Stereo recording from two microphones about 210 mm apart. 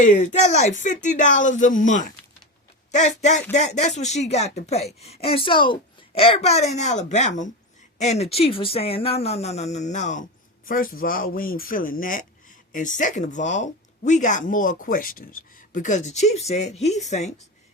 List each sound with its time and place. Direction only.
0.0 s a woman's voice: 35° left (ahead or behind)